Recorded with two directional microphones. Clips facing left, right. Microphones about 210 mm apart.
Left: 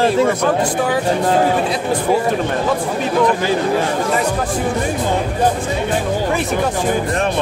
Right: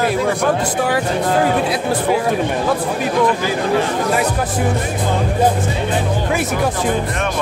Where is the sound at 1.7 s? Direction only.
5° right (ahead or behind).